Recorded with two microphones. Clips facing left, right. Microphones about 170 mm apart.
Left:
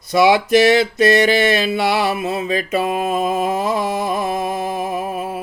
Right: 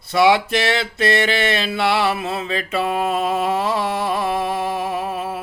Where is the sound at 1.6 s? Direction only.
15° left (ahead or behind).